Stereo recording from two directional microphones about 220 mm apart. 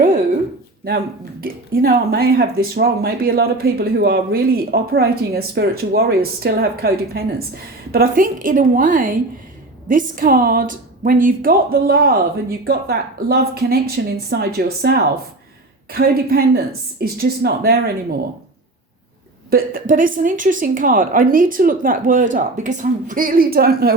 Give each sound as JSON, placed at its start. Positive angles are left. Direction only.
{"t": 0.9, "sound": "a woman's voice", "side_deg": -45}
{"t": 19.5, "sound": "a woman's voice", "side_deg": -40}